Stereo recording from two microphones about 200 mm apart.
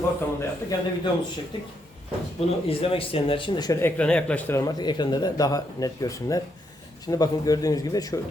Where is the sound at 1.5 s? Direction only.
25° left (ahead or behind).